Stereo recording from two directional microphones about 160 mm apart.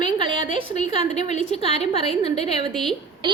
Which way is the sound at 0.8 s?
45° left (ahead or behind).